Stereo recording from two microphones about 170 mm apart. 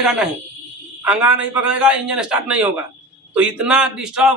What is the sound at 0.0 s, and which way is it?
A man's voice, 5° right (ahead or behind).